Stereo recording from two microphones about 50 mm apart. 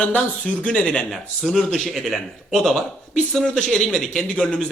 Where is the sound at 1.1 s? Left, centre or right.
Centre.